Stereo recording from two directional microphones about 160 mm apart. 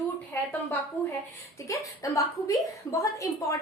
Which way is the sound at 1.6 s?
20° left (ahead or behind).